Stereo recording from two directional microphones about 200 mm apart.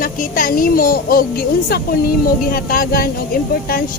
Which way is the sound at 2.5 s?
45° left (ahead or behind).